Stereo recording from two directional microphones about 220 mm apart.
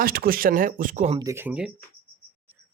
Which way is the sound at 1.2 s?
10° right (ahead or behind).